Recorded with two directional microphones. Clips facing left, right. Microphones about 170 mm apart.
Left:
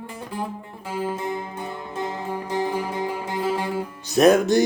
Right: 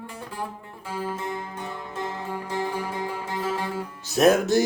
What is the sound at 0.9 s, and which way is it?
Music, 15° left (ahead or behind).